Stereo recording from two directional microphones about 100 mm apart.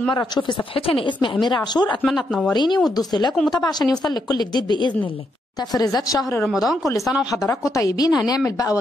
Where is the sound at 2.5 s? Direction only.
50° left (ahead or behind).